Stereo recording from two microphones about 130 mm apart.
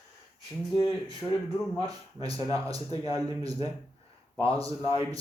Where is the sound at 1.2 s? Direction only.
15° left (ahead or behind).